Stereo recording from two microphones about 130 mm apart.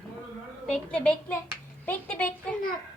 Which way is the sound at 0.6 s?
5° left (ahead or behind).